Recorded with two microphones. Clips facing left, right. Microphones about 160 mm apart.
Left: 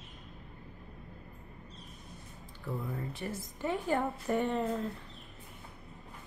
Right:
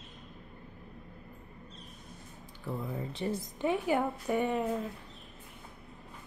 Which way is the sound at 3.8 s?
5° right (ahead or behind).